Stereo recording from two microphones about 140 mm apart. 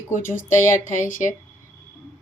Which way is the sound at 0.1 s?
65° left (ahead or behind).